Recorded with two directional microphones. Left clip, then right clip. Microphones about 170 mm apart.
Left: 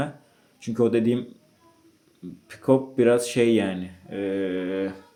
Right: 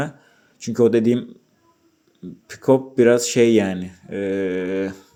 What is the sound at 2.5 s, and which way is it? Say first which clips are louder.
Speech: right 4 dB; 35° right (ahead or behind).